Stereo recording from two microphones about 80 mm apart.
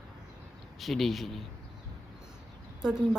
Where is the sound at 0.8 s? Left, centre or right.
Centre.